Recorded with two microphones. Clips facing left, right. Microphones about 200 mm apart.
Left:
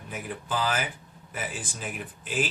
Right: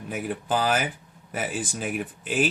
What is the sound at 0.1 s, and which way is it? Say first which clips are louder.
Speech: right 6 dB; 60° right (ahead or behind).